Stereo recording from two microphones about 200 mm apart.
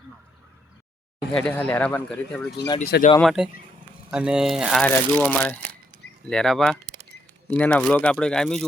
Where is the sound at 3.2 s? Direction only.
Centre (ahead or behind).